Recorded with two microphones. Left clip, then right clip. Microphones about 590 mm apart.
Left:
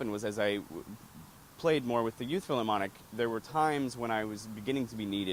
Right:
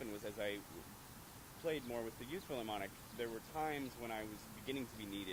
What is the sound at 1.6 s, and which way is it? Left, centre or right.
Speech, left.